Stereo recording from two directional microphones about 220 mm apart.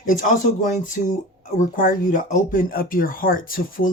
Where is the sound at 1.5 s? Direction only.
40° left (ahead or behind).